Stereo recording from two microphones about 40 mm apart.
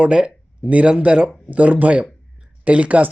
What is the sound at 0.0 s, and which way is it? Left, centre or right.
Speech, right.